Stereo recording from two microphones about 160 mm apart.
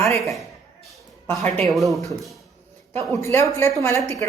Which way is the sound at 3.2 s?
15° left (ahead or behind).